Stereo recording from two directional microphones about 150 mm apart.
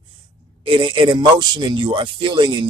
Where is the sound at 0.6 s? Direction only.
35° right (ahead or behind).